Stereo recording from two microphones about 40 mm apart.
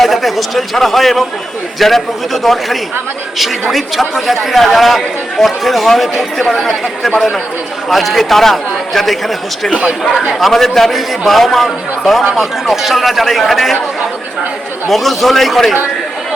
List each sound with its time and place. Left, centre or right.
0.0 s a man's voice: centre
6.5 s speech: centre
7.9 s a man's voice: centre
10.4 s a man's voice: centre
14.8 s a man's voice: centre